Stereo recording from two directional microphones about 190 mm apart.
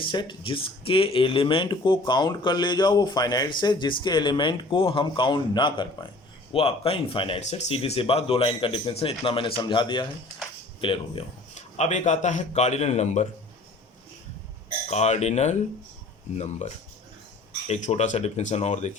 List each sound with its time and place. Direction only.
0.0 s a man's voice: 25° left (ahead or behind)
14.8 s speech: 35° left (ahead or behind)